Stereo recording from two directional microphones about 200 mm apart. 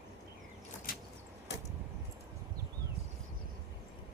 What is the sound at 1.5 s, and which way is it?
Vehicle, 60° left (ahead or behind).